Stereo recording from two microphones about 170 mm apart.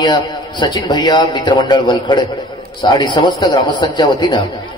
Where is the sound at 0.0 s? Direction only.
25° left (ahead or behind).